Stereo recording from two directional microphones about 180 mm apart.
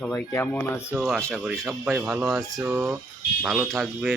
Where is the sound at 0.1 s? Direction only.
15° left (ahead or behind).